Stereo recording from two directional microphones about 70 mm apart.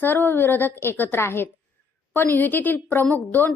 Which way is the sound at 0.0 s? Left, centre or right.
Left.